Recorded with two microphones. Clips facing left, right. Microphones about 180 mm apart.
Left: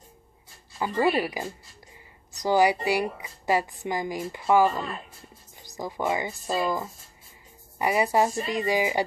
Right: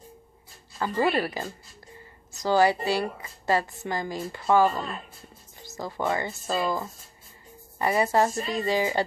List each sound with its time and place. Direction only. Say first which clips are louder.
0.7 s a woman's voice: left 1 dB; 15° left (ahead or behind)